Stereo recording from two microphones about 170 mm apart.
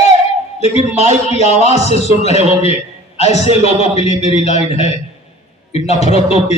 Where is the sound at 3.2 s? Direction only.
40° left (ahead or behind).